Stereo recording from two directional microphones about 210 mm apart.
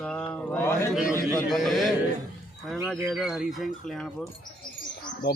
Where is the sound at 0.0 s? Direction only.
5° left (ahead or behind).